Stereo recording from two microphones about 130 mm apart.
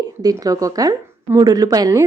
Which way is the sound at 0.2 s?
30° right (ahead or behind).